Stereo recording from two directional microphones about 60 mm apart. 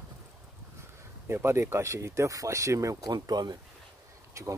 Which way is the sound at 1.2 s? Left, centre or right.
Right.